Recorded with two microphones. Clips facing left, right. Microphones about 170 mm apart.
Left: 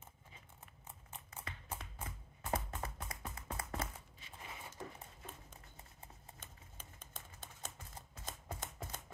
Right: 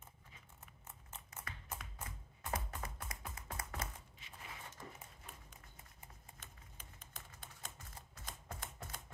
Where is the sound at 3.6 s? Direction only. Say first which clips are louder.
Left 4 dB; 30° left (ahead or behind).